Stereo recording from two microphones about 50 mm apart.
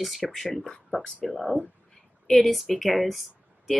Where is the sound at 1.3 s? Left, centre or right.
Centre.